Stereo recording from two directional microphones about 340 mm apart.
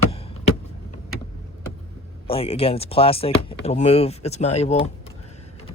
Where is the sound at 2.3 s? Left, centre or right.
Centre.